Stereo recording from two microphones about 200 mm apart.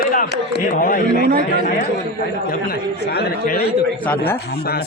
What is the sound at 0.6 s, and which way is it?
Speech, 45° left (ahead or behind).